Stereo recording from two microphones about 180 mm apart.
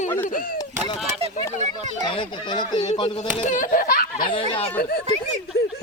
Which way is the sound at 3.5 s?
45° left (ahead or behind).